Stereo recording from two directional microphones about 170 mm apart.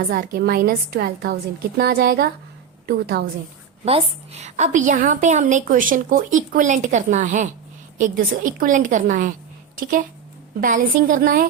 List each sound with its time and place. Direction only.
0.0 s a woman's voice: 60° right (ahead or behind)
3.8 s a woman's voice: 35° right (ahead or behind)
10.6 s a woman's voice: 55° right (ahead or behind)